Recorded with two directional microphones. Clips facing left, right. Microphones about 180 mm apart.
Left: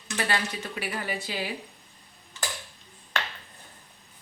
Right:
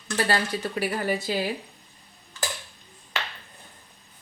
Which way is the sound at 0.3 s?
40° right (ahead or behind).